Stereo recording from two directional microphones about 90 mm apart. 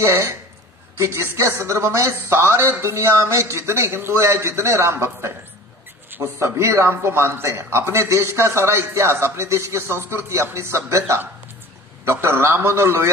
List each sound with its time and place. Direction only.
0.0 s a man's voice: 30° right (ahead or behind)
6.0 s a sound: 20° right (ahead or behind)
6.4 s a man's voice: 30° right (ahead or behind)